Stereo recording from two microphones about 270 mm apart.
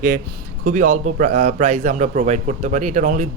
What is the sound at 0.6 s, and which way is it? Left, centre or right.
A man's voice, right.